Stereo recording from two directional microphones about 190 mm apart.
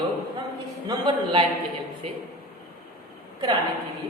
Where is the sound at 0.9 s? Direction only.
25° right (ahead or behind).